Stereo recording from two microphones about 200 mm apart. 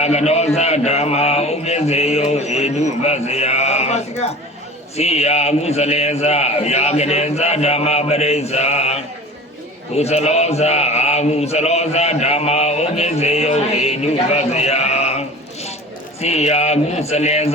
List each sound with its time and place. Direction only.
0.0 s a man's voice: 35° left (ahead or behind)
16.2 s a man's voice: 35° left (ahead or behind)